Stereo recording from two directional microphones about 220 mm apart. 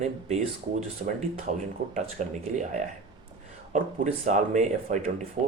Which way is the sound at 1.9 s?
35° right (ahead or behind).